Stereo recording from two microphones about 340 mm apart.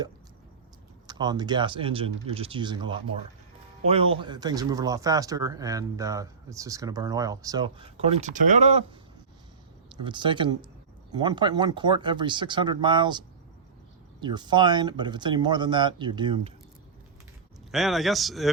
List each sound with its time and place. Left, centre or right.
1.0 s speech: centre
4.2 s speech: centre
10.0 s speech: centre
17.7 s speech: centre